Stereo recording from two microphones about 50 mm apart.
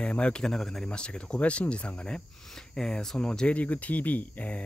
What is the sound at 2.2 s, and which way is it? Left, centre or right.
Speech, centre.